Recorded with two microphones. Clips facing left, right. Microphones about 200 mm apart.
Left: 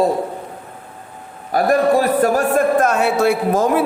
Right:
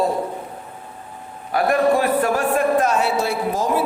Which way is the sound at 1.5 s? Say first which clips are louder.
Left 2 dB; 40° left (ahead or behind).